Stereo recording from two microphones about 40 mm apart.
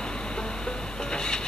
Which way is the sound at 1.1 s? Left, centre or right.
Left.